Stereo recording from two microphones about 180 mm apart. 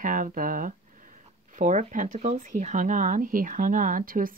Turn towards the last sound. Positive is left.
turn(degrees=-50)  # may be behind; listen again after turning